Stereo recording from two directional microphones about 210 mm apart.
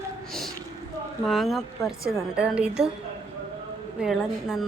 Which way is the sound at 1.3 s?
Centre (ahead or behind).